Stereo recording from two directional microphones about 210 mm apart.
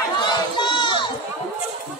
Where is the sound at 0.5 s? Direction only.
20° left (ahead or behind).